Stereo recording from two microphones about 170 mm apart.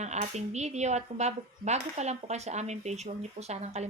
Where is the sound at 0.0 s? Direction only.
40° right (ahead or behind).